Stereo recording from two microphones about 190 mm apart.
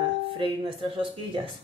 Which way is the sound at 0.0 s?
25° right (ahead or behind).